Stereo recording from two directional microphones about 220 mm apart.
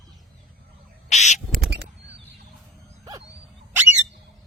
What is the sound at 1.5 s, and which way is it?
Crow, 50° right (ahead or behind).